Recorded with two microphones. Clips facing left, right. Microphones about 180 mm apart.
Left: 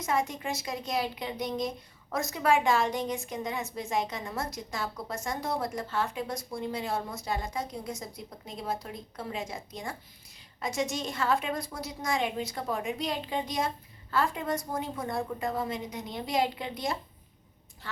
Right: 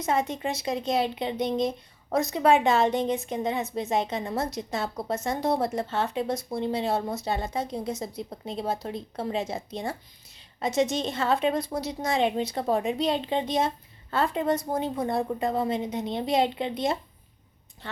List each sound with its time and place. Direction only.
0.0 s a woman's voice: 25° right (ahead or behind)